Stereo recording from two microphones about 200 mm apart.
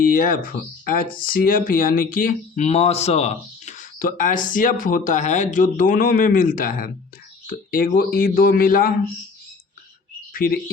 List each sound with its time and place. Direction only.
0.0 s speech: 45° left (ahead or behind)
10.3 s speech: 45° left (ahead or behind)